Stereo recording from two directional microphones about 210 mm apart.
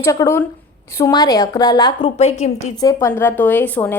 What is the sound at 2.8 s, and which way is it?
A woman's voice, 15° left (ahead or behind).